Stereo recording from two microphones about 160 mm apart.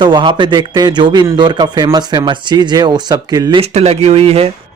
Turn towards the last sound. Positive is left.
turn(degrees=-40)  # may be behind; listen again after turning